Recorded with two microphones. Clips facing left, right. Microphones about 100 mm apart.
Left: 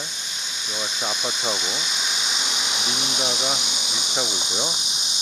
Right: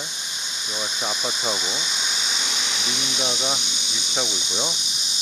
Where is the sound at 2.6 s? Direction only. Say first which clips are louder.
Left 1 dB; 25° left (ahead or behind).